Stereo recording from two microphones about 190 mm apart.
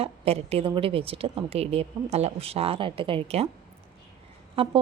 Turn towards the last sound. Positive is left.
turn(degrees=-30)  # may be behind; listen again after turning